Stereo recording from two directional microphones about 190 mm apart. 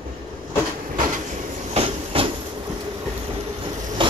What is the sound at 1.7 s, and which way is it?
Train, 30° right (ahead or behind).